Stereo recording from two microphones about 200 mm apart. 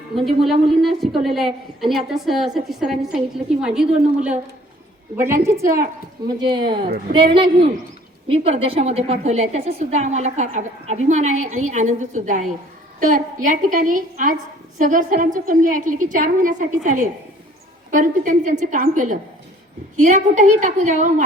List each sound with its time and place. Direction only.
0.3 s a woman's voice: centre (ahead or behind); by 21.2 s 35° right (ahead or behind)